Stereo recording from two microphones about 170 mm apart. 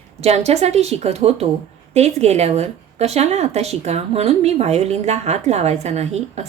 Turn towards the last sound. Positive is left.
turn(degrees=-40)  # may be behind; listen again after turning